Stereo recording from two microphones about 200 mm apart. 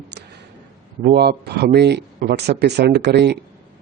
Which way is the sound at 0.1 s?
55° right (ahead or behind).